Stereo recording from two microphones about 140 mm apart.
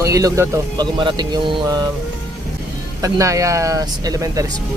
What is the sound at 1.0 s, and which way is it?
Speech, 35° right (ahead or behind).